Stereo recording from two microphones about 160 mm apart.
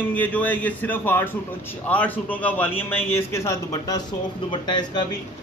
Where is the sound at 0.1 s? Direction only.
10° left (ahead or behind).